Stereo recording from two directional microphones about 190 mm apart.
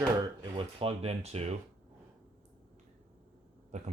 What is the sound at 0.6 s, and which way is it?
Speech, 30° right (ahead or behind).